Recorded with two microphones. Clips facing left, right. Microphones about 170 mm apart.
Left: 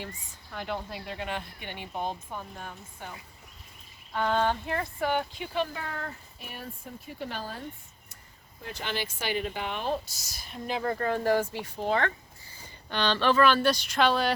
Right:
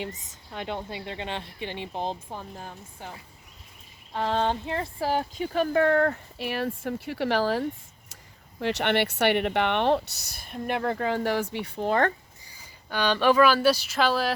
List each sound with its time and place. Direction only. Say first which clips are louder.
1.2 s speech: right 2 dB; 30° right (ahead or behind)
4.1 s speech: right 1 dB; 30° right (ahead or behind)
5.8 s speech: right 16 dB; 65° right (ahead or behind); by 7.6 s 90° right
8.6 s speech: right 10 dB; 75° right (ahead or behind)
12.5 s speech: right 1 dB; 10° right (ahead or behind)